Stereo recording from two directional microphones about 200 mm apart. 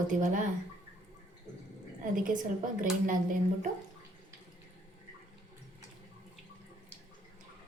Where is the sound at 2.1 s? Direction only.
45° right (ahead or behind).